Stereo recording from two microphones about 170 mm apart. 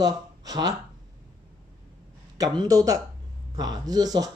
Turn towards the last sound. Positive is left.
turn(degrees=-20)  # may be behind; listen again after turning